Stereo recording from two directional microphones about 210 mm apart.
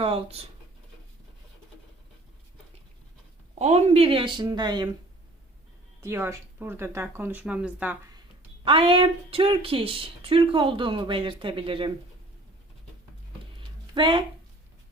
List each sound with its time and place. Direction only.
0.0 s speech: 25° right (ahead or behind)
3.6 s speech: 30° right (ahead or behind)
6.0 s speech: 10° right (ahead or behind)
8.6 s speech: 25° right (ahead or behind)
13.6 s a sound: 25° right (ahead or behind)